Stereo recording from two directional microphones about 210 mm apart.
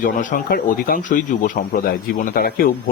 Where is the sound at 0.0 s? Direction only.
40° left (ahead or behind).